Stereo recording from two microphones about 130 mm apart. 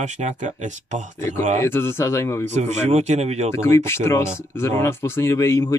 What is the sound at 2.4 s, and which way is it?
Speech, 60° right (ahead or behind).